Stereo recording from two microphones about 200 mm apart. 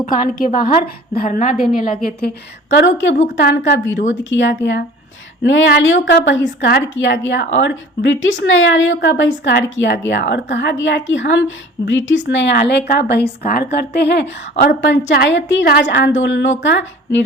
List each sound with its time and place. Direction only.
0.3 s a woman's voice: 45° left (ahead or behind); by 3.1 s 65° left (ahead or behind)
3.3 s a woman's voice: 55° left (ahead or behind)
4.2 s a woman's voice: 65° left (ahead or behind)